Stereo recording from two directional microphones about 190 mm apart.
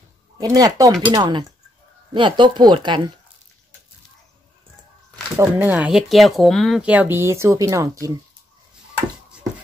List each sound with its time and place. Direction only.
0.4 s speech: 20° right (ahead or behind)
5.4 s speech: 10° right (ahead or behind)